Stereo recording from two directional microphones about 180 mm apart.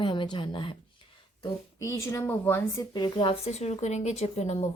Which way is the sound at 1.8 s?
15° left (ahead or behind).